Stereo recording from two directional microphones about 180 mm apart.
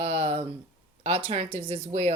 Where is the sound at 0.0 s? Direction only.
35° right (ahead or behind).